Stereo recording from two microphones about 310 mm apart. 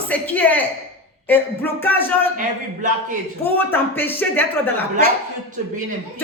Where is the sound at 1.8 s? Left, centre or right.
Centre.